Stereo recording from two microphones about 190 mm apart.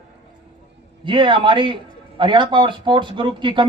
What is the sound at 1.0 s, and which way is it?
Speech, 25° right (ahead or behind).